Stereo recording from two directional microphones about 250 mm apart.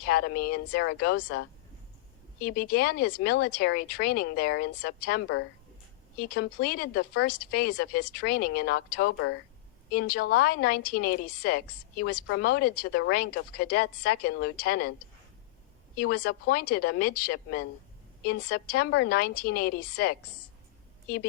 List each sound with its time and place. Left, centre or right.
0.0 s speech: left
16.0 s speech: left